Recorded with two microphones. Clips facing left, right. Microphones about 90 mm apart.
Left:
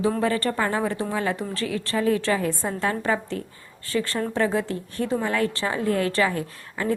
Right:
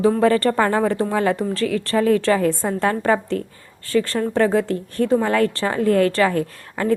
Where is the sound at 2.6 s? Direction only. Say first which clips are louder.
Right 5 dB; 50° right (ahead or behind).